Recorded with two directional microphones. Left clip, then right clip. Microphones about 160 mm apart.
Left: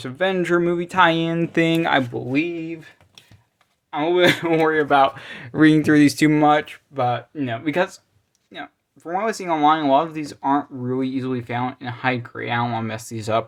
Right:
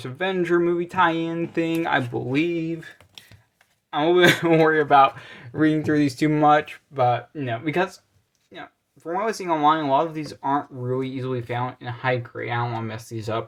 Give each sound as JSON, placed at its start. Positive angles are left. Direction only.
{"t": 0.0, "sound": "speech", "side_deg": 20}
{"t": 2.1, "sound": "speech", "side_deg": -5}
{"t": 3.9, "sound": "speech", "side_deg": -5}
{"t": 6.4, "sound": "speech", "side_deg": 10}